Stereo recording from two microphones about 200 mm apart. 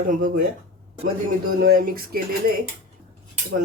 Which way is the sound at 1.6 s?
45° right (ahead or behind).